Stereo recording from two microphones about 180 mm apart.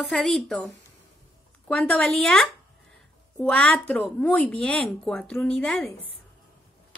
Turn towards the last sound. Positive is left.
turn(degrees=5)  # may be behind; listen again after turning